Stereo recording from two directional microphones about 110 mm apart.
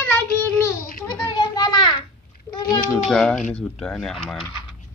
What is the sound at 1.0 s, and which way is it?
Speech, 30° left (ahead or behind).